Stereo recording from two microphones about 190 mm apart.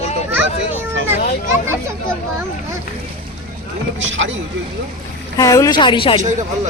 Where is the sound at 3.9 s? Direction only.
80° right.